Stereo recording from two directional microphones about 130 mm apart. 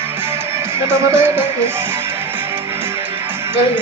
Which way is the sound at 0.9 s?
20° right (ahead or behind).